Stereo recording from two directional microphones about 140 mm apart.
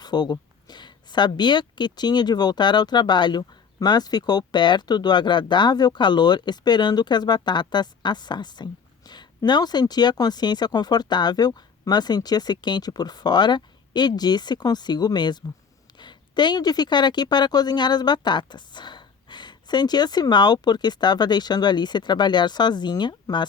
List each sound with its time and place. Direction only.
0.0 s a woman's voice: 30° left (ahead or behind)